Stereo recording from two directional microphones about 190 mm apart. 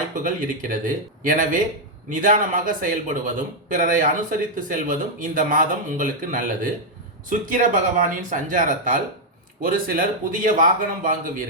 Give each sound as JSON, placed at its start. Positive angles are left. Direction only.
{"t": 0.1, "sound": "a man's voice", "side_deg": -45}